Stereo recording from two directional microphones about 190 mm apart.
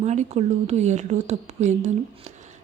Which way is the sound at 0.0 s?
35° right (ahead or behind).